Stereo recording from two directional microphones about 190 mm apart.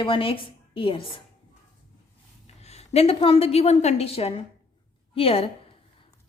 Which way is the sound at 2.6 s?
35° left (ahead or behind).